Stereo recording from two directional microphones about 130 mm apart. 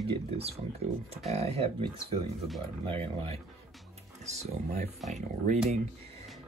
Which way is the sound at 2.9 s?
40° right (ahead or behind).